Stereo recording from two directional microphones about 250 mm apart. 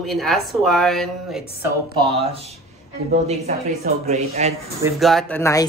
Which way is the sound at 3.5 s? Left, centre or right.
Right.